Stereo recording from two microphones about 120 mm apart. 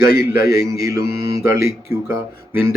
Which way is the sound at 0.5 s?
25° right (ahead or behind).